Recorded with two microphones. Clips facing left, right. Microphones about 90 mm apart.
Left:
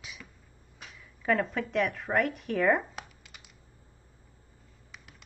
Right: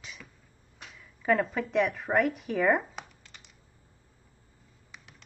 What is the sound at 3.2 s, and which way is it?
Typing, 10° left (ahead or behind).